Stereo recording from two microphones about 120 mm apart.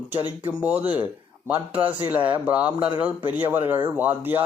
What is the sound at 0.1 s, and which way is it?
Speech, 15° right (ahead or behind).